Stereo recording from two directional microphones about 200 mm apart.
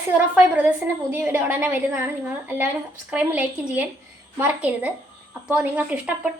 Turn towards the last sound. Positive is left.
turn(degrees=-5)  # may be behind; listen again after turning